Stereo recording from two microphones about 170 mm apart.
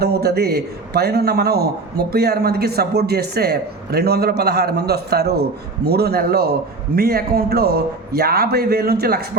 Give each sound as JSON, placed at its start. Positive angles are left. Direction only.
{"t": 0.0, "sound": "a man's voice", "side_deg": -70}